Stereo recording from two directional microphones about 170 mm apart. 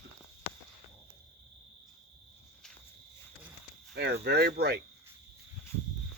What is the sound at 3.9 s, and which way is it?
Speech, 75° right (ahead or behind).